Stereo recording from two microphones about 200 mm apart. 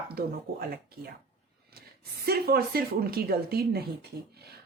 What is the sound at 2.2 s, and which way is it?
A woman's voice, 50° right (ahead or behind).